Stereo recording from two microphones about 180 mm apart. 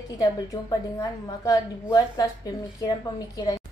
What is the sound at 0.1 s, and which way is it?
A woman's voice, 20° left (ahead or behind).